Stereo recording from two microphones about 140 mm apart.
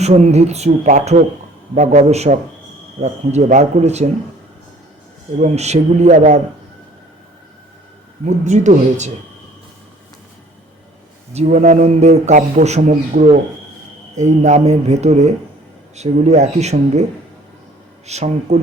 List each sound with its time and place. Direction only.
0.0 s a man's voice: 50° right (ahead or behind)
5.4 s a man's voice: 55° right (ahead or behind)
8.2 s a man's voice: 55° right (ahead or behind)
11.3 s a man's voice: 50° right (ahead or behind)
18.0 s speech: 50° right (ahead or behind)